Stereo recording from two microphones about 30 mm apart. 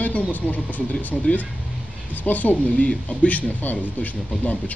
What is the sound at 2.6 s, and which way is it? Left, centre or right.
Speech, left.